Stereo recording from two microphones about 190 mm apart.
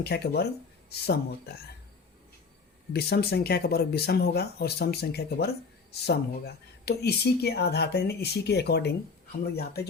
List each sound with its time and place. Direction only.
0.0 s speech: 60° left (ahead or behind)
2.9 s speech: 55° left (ahead or behind)